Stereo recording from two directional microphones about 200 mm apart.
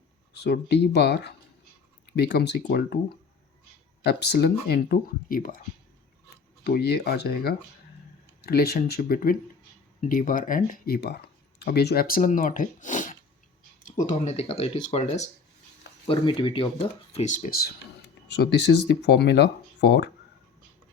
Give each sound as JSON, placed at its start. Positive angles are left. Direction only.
{"t": 0.3, "sound": "speech", "side_deg": 55}
{"t": 4.0, "sound": "speech", "side_deg": 55}
{"t": 6.7, "sound": "speech", "side_deg": 55}